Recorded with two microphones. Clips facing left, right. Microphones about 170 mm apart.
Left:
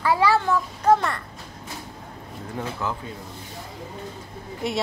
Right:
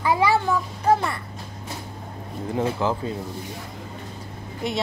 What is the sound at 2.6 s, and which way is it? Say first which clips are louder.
Speech: right 6 dB; 30° right (ahead or behind).